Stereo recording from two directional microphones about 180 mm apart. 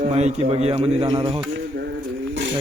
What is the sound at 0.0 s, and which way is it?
A man's voice, 40° right (ahead or behind).